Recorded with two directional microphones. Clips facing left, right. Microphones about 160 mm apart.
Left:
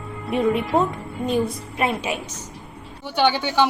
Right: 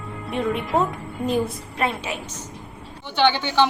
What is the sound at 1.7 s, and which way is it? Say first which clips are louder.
A woman's voice: left 2 dB; 15° left (ahead or behind).